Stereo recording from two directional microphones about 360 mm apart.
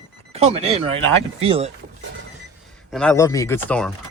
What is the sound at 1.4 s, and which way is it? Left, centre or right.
Speech, centre.